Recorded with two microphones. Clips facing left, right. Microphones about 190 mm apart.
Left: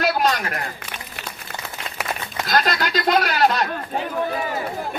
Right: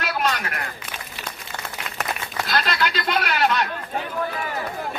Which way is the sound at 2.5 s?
40° left (ahead or behind).